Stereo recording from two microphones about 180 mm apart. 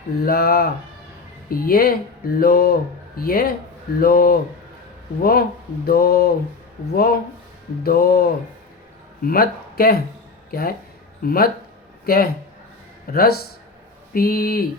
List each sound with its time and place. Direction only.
0.2 s speech: 60° left (ahead or behind)